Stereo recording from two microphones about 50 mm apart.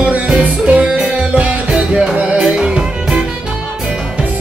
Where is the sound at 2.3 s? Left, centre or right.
Centre.